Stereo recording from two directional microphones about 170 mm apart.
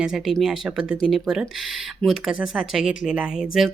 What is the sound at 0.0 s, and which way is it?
A woman's voice, centre (ahead or behind).